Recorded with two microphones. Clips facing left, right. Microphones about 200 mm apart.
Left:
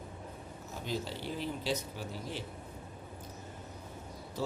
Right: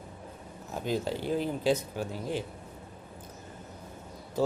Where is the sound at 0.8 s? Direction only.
50° right (ahead or behind).